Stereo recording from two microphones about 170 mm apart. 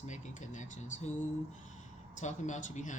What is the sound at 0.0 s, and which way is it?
Speech, 45° left (ahead or behind).